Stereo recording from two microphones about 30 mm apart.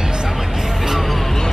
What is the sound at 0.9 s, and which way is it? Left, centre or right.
Music, centre.